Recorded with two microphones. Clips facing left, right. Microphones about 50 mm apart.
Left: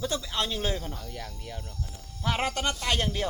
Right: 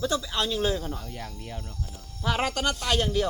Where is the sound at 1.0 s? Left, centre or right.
Centre.